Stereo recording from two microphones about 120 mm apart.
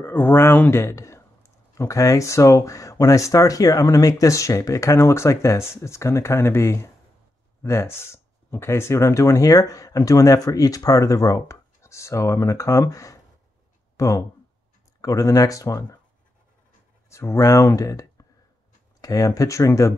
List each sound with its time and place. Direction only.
0.0 s speech: 15° left (ahead or behind)
17.1 s speech: 25° left (ahead or behind)